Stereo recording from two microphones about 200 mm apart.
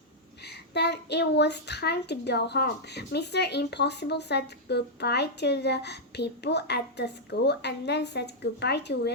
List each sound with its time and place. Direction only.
0.4 s a woman's voice: 55° left (ahead or behind)